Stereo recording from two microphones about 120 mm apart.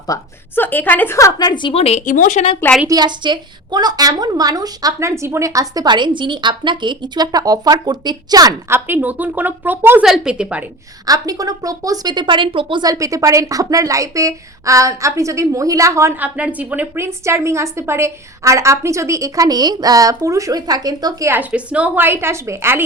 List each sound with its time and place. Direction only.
0.1 s a woman's voice: 15° left (ahead or behind)
1.4 s a woman's voice: 40° left (ahead or behind)
1.8 s speech: 65° left (ahead or behind); by 2.5 s 90° left
2.8 s a woman's voice: 35° right (ahead or behind)
8.7 s speech: 15° right (ahead or behind)
11.0 s a woman's voice: 30° right (ahead or behind)
12.8 s a woman's voice: 30° right (ahead or behind)
16.2 s a woman's voice: 10° right (ahead or behind); by 21.2 s 35° right (ahead or behind)
21.2 s a woman's voice: 15° right (ahead or behind)